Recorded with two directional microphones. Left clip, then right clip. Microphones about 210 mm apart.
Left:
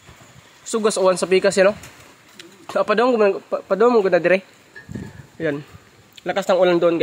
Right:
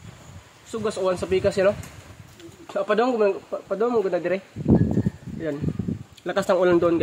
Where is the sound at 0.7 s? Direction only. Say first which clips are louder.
Left 7 dB; 35° left (ahead or behind).